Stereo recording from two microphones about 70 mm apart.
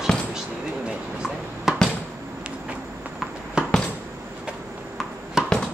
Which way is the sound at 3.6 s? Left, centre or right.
Centre.